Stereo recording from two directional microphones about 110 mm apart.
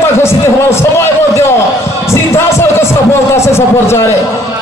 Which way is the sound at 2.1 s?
25° left (ahead or behind).